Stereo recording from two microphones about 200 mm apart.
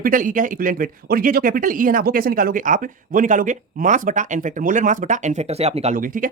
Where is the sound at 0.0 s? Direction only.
40° right (ahead or behind).